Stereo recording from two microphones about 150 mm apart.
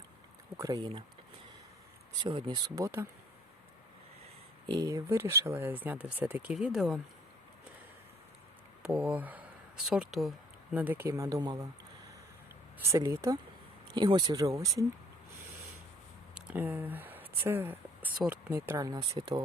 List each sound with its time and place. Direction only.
0.5 s speech: 20° right (ahead or behind)
2.2 s speech: 30° right (ahead or behind)
4.7 s speech: 25° right (ahead or behind); by 7.0 s 5° right (ahead or behind)
8.8 s speech: 5° right (ahead or behind)
10.8 s speech: 10° right (ahead or behind)
12.9 s speech: 20° right (ahead or behind)
16.3 s speech: 10° right (ahead or behind)
18.9 s speech: 25° right (ahead or behind)